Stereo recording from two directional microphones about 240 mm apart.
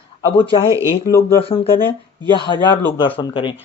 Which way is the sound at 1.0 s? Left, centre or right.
Centre.